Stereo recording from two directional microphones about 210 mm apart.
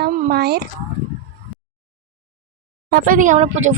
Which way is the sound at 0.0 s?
50° right (ahead or behind).